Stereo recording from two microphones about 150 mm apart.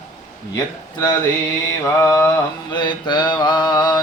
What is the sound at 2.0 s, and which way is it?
Mantra, 20° left (ahead or behind).